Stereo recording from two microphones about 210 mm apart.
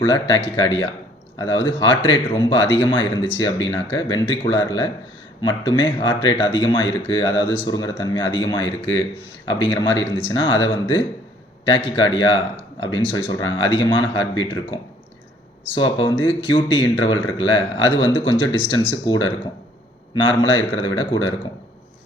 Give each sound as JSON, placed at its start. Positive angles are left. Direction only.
{"t": 0.0, "sound": "speech", "side_deg": 20}